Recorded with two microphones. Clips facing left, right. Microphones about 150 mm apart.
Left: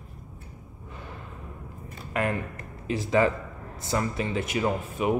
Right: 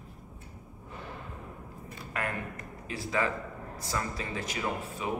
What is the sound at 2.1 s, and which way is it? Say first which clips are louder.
Speech: left 7 dB; 20° left (ahead or behind).